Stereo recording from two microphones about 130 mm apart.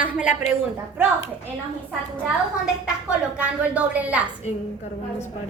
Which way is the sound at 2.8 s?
10° right (ahead or behind).